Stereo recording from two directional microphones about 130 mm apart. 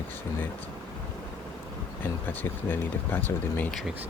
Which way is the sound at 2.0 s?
15° left (ahead or behind).